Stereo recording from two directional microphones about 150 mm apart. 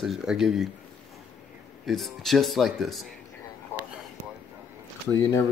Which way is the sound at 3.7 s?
15° left (ahead or behind).